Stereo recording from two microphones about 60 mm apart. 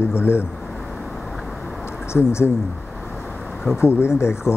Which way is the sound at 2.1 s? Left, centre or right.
Left.